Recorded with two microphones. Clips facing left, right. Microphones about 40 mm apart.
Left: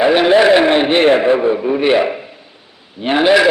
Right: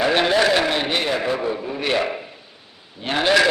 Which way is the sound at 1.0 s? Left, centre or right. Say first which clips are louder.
Left 11 dB; left.